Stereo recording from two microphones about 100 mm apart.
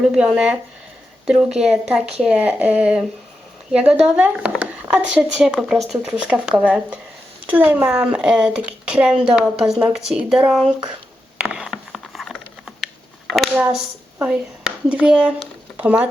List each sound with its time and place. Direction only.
0.0 s speech: 5° right (ahead or behind)
11.3 s a sound: 10° right (ahead or behind)
14.2 s speech: 10° right (ahead or behind)